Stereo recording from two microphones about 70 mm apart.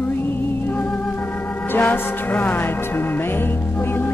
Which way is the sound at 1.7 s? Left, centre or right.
Left.